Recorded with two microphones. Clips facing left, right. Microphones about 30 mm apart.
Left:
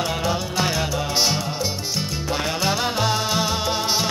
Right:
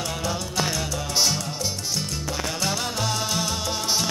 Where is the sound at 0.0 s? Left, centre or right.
Left.